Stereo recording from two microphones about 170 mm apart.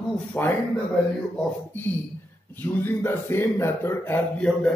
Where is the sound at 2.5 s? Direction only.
10° left (ahead or behind).